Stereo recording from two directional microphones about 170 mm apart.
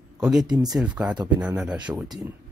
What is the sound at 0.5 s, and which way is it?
Speech, 25° right (ahead or behind).